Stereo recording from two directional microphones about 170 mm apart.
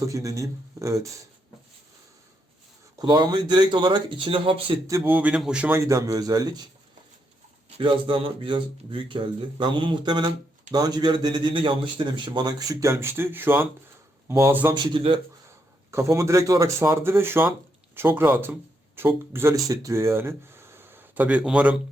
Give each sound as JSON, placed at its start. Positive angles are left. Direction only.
{"t": 0.0, "sound": "speech", "side_deg": -20}
{"t": 3.0, "sound": "speech", "side_deg": -25}
{"t": 4.9, "sound": "a man's voice", "side_deg": -15}
{"t": 7.8, "sound": "a man's voice", "side_deg": -30}
{"t": 14.8, "sound": "speech", "side_deg": -30}
{"t": 15.4, "sound": "a man's voice", "side_deg": -15}